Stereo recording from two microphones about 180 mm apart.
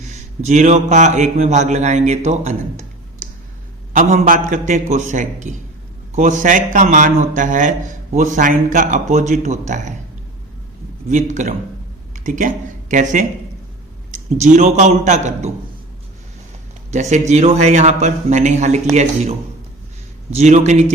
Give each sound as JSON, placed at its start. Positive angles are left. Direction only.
{"t": 0.0, "sound": "a man's voice", "side_deg": -40}
{"t": 3.9, "sound": "a man's voice", "side_deg": -45}
{"t": 11.1, "sound": "a man's voice", "side_deg": -40}
{"t": 14.3, "sound": "a man's voice", "side_deg": -40}
{"t": 16.9, "sound": "a man's voice", "side_deg": -40}